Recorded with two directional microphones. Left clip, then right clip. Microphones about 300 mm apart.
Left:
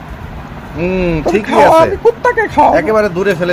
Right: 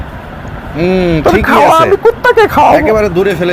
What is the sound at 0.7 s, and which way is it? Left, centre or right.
Speech, centre.